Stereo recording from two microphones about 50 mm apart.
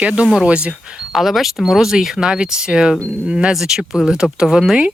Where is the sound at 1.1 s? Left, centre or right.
Centre.